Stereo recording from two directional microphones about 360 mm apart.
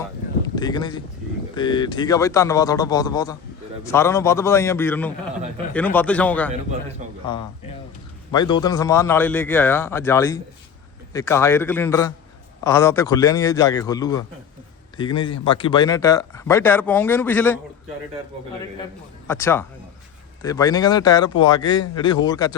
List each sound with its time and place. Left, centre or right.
0.4 s a man's voice: centre
7.0 s a sound: centre
8.3 s speech: centre
19.3 s speech: centre